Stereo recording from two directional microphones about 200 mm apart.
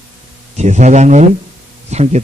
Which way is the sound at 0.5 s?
35° right (ahead or behind).